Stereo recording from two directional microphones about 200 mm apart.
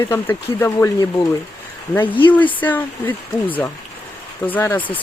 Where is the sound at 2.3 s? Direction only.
10° left (ahead or behind).